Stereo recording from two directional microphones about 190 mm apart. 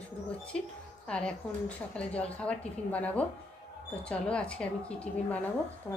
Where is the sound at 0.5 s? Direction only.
5° left (ahead or behind).